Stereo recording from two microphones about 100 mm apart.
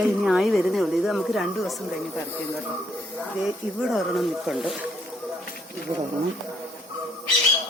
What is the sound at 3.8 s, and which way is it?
Speech, centre (ahead or behind).